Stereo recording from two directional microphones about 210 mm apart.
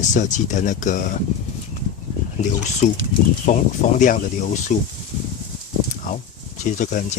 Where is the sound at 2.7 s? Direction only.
35° left (ahead or behind).